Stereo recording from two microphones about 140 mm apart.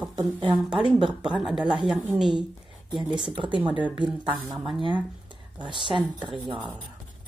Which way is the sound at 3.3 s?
35° right (ahead or behind).